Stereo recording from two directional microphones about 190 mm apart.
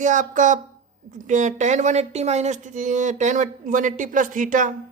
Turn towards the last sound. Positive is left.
turn(degrees=-45)  # may be behind; listen again after turning